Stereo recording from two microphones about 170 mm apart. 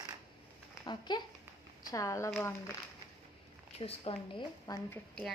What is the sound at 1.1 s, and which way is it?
A woman's voice, 25° left (ahead or behind).